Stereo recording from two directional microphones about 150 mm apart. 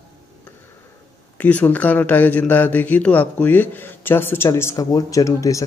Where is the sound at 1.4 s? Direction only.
10° left (ahead or behind).